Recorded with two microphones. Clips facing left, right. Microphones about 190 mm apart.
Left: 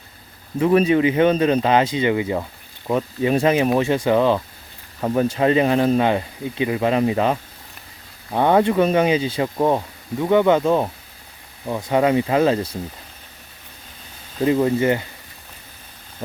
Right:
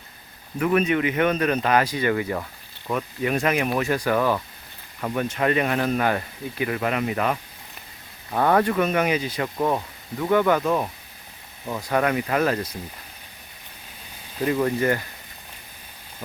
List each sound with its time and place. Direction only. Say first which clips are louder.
0.6 s speech: left 5 dB; 30° left (ahead or behind)
14.4 s speech: left 4 dB; 20° left (ahead or behind)